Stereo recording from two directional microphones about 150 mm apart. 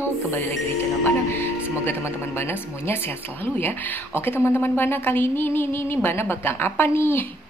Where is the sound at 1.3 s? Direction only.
15° left (ahead or behind).